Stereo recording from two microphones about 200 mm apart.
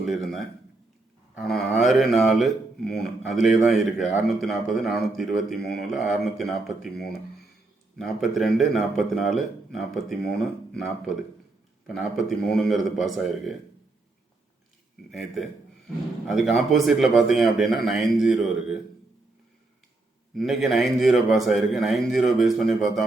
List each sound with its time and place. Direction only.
0.0 s a man's voice: centre (ahead or behind)
15.1 s speech: centre (ahead or behind)
20.3 s speech: centre (ahead or behind)